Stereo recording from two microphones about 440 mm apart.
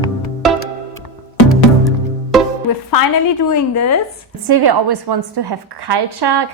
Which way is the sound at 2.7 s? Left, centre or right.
Left.